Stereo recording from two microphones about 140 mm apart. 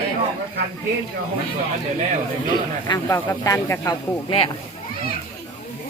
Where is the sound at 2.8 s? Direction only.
30° left (ahead or behind).